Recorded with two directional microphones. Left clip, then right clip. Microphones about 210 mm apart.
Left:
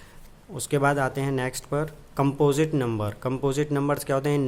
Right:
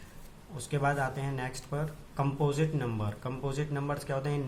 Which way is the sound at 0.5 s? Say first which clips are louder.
Left 8 dB; 50° left (ahead or behind).